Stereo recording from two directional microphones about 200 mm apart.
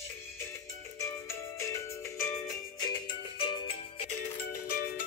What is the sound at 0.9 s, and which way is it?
Music, 15° left (ahead or behind).